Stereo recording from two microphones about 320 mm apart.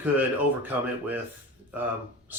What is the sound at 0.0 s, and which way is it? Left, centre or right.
Speech, centre.